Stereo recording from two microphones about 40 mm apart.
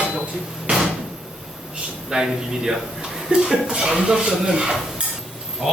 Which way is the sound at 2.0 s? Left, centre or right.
Centre.